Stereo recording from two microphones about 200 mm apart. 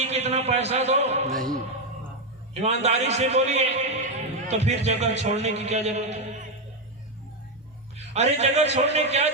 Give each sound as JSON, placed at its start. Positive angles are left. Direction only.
{"t": 0.0, "sound": "a man's voice", "side_deg": -30}
{"t": 1.3, "sound": "speech", "side_deg": 0}
{"t": 2.6, "sound": "a man's voice", "side_deg": -35}
{"t": 7.9, "sound": "a man's voice", "side_deg": -35}